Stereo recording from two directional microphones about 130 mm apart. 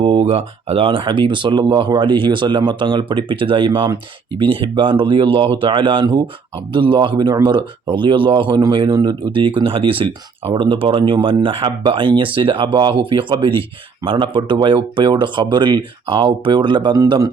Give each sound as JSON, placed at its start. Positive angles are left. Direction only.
{"t": 0.0, "sound": "a man's voice", "side_deg": -45}